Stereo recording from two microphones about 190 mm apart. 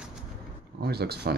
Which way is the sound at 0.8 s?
55° right (ahead or behind).